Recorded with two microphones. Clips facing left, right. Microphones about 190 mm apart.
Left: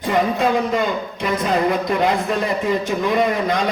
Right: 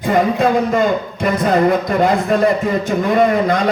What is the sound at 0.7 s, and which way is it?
Speech, 50° right (ahead or behind).